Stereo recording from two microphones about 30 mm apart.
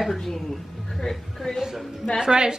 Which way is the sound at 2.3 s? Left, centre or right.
Right.